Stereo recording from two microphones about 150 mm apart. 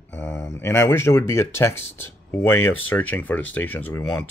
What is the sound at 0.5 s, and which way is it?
Speech, 15° left (ahead or behind).